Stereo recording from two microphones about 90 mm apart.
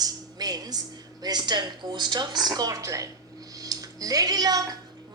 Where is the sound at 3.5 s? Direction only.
40° right (ahead or behind).